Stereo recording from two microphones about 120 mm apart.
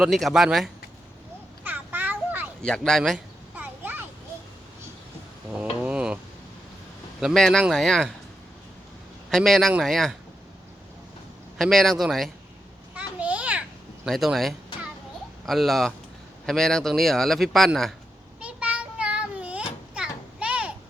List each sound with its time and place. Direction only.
0.0 s speech: centre (ahead or behind)
1.6 s a sound: 15° right (ahead or behind)
2.6 s speech: 5° left (ahead or behind)
3.5 s a sound: 15° right (ahead or behind)
5.8 s a sound: 10° right (ahead or behind)
7.2 s speech: centre (ahead or behind)
9.3 s speech: centre (ahead or behind)
11.5 s speech: centre (ahead or behind)
12.9 s children playing: 10° right (ahead or behind)
14.1 s speech: centre (ahead or behind)
18.3 s child singing: 10° right (ahead or behind)
19.9 s a sound: 10° right (ahead or behind)